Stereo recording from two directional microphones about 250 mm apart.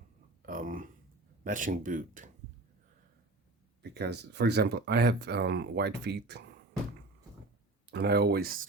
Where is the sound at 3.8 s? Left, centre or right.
Right.